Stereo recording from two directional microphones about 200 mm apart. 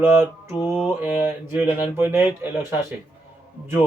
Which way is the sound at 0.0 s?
10° right (ahead or behind).